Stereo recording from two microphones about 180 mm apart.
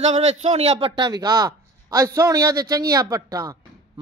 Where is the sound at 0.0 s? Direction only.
40° right (ahead or behind).